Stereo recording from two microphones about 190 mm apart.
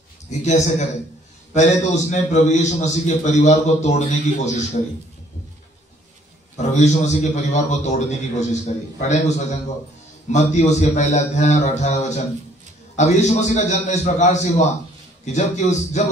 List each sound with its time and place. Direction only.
0.3 s a man's voice: 40° left (ahead or behind)
6.5 s a man's voice: 35° left (ahead or behind)